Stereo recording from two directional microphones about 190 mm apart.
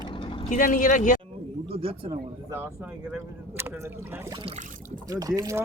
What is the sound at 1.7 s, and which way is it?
Speech, 30° right (ahead or behind).